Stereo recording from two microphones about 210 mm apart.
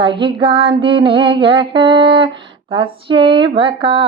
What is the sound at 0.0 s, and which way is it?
Female singing, 25° right (ahead or behind).